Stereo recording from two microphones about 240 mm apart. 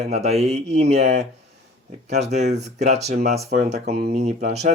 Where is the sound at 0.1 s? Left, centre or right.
Right.